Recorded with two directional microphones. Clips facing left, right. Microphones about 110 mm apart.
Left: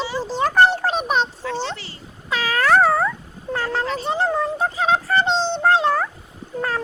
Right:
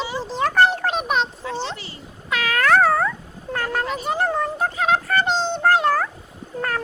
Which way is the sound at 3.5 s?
20° left (ahead or behind).